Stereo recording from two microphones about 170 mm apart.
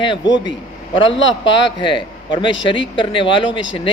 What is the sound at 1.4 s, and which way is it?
Speech, 30° left (ahead or behind).